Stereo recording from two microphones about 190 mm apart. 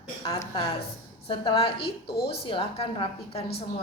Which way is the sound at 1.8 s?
55° left (ahead or behind).